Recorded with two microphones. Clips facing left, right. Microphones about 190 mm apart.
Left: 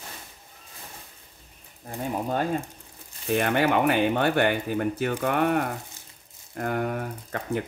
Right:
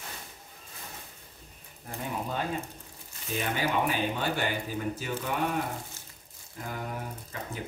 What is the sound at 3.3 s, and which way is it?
Speech, 65° left (ahead or behind).